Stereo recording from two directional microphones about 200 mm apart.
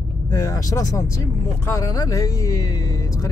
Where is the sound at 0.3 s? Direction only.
15° left (ahead or behind).